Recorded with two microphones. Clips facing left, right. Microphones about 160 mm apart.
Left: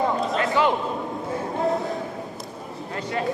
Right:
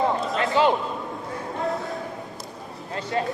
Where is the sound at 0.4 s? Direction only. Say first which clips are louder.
Right 2 dB; 25° right (ahead or behind).